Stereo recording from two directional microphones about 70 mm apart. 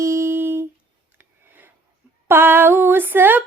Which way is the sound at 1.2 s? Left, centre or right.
Right.